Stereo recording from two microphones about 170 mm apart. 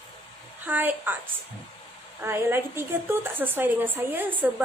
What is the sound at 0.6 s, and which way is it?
Speech, 10° right (ahead or behind).